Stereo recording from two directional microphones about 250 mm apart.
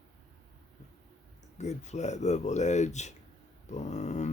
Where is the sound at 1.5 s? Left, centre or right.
Left.